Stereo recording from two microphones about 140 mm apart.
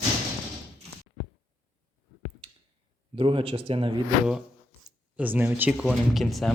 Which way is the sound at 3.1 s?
40° right (ahead or behind).